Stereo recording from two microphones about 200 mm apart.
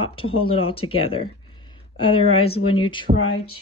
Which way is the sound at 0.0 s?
25° left (ahead or behind).